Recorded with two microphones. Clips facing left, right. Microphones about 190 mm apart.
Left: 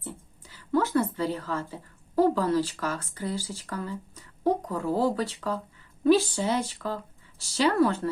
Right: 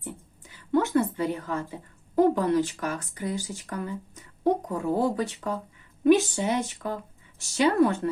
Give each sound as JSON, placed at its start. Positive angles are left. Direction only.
{"t": 0.0, "sound": "a woman's voice", "side_deg": -20}